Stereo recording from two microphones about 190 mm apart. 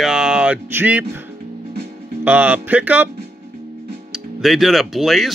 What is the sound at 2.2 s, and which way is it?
Speech, 5° right (ahead or behind).